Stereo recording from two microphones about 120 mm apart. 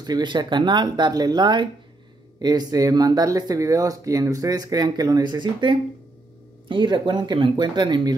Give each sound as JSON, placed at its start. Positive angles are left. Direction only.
{"t": 0.0, "sound": "speech", "side_deg": -35}